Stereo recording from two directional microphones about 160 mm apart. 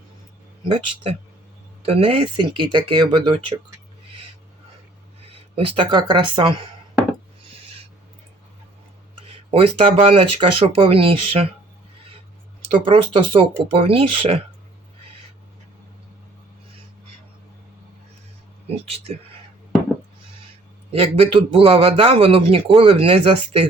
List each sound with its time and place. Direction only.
0.6 s a man's voice: 35° right (ahead or behind)
5.3 s speech: 35° right (ahead or behind)
9.3 s a man's voice: 40° right (ahead or behind)
12.8 s a man's voice: 35° right (ahead or behind)
20.9 s a man's voice: 35° right (ahead or behind)